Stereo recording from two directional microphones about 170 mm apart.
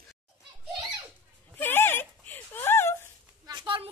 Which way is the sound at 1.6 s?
10° left (ahead or behind).